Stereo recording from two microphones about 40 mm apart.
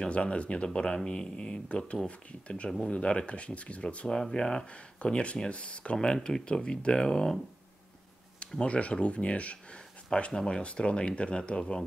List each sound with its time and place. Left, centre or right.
0.0 s speech: left
4.2 s speech: centre
8.5 s speech: left